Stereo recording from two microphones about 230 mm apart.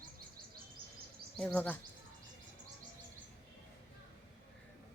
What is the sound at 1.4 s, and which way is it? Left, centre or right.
Speech, centre.